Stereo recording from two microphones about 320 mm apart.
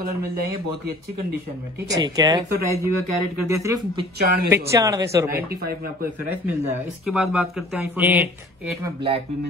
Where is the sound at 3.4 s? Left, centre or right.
Centre.